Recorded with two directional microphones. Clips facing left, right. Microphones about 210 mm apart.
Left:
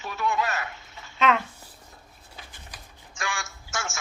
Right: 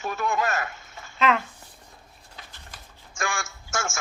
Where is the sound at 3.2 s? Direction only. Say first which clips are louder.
Right 3 dB; 45° right (ahead or behind).